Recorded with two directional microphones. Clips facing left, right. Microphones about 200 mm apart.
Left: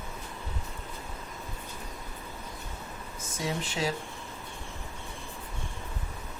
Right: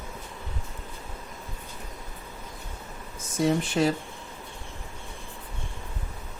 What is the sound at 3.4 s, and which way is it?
Speech, 55° right (ahead or behind).